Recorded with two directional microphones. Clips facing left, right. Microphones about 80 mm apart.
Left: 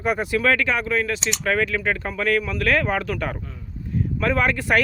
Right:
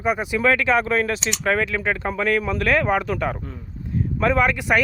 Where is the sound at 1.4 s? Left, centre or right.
Right.